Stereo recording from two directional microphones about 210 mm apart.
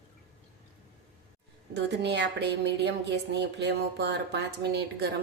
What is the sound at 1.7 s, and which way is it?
Speech, 55° right (ahead or behind).